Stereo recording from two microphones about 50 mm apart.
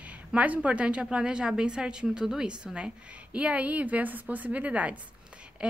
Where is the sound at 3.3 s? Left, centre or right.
Right.